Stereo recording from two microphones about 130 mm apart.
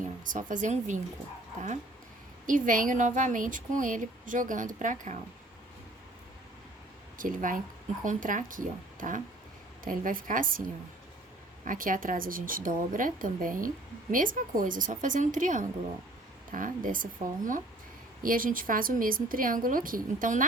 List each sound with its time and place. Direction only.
0.3 s speech: 80° right
2.5 s speech: 90° right; by 5.2 s 75° right (ahead or behind)
7.2 s a woman's voice: 90° right
11.6 s a woman's voice: 90° right